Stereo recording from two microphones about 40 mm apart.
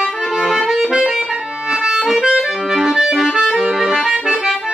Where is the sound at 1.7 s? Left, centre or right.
Centre.